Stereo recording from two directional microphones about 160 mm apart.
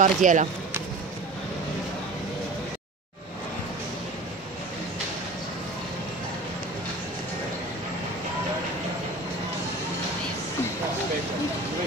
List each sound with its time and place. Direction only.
0.0 s speech: 50° right (ahead or behind)